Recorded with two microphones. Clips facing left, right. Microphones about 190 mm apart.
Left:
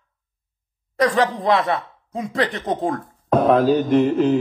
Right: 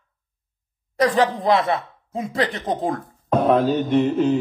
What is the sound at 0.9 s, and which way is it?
A woman's voice, centre (ahead or behind).